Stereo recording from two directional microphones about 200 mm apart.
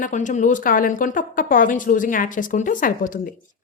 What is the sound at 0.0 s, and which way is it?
A woman's voice, 40° left (ahead or behind).